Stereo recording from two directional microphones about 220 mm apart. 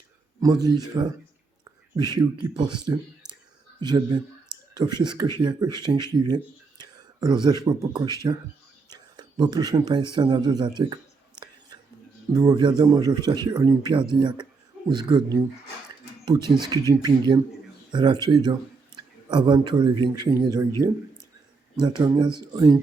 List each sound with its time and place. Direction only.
0.4 s speech: 15° right (ahead or behind)
2.0 s speech: 20° right (ahead or behind)
8.9 s a sound: 20° right (ahead or behind)
12.3 s a man's voice: 15° right (ahead or behind)
21.8 s speech: 20° right (ahead or behind)